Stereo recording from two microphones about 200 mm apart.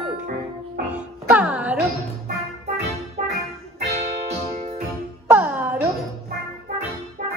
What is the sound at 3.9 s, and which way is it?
Music, 30° right (ahead or behind).